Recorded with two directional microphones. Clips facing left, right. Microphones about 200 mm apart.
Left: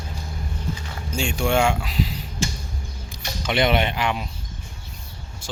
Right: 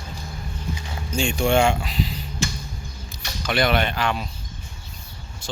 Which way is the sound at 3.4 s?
25° left (ahead or behind).